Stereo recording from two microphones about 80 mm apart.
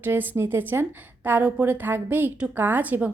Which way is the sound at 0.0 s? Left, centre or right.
Right.